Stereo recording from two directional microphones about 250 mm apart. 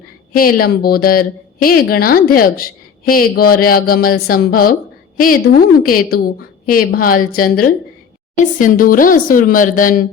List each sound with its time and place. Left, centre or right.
0.3 s speech: left